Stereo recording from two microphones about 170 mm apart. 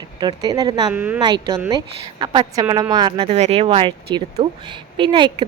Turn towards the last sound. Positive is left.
turn(degrees=-30)  # may be behind; listen again after turning